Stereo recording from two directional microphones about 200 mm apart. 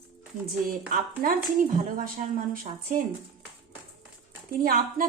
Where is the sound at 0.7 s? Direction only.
45° right (ahead or behind).